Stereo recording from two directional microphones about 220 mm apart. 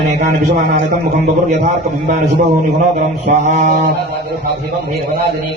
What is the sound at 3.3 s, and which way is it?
Speech, 30° right (ahead or behind).